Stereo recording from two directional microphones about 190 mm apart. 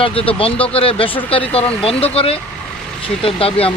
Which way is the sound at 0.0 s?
30° left (ahead or behind).